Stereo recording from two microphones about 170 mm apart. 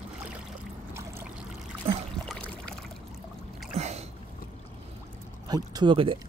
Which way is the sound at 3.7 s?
40° right (ahead or behind).